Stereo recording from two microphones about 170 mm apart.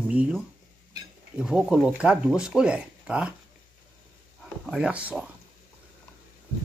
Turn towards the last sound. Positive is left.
turn(degrees=-10)  # may be behind; listen again after turning